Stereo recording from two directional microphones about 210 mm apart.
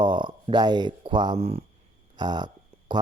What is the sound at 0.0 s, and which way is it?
Speech, 20° right (ahead or behind).